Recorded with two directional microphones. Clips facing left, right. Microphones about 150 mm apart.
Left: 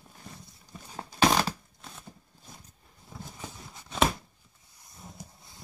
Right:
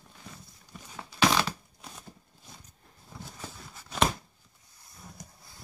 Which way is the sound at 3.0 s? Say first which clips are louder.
Left 1 dB; 5° left (ahead or behind).